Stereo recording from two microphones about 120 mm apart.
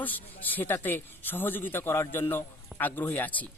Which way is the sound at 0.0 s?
15° left (ahead or behind).